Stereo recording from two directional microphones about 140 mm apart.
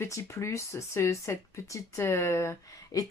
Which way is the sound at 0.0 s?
20° left (ahead or behind).